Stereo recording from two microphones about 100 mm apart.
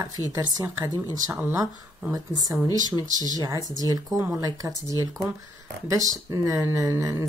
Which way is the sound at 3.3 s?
40° right (ahead or behind).